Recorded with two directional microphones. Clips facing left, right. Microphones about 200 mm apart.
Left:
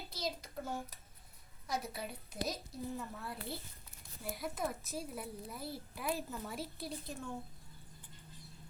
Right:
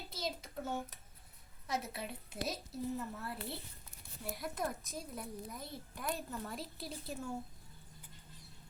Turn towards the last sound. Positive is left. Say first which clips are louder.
# even
turn(degrees=0)  # may be behind; listen again after turning